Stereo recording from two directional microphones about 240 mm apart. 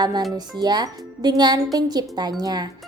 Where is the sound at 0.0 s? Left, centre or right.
Centre.